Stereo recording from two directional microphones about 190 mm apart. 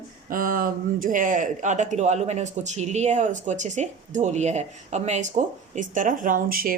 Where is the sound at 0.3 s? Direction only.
45° right (ahead or behind).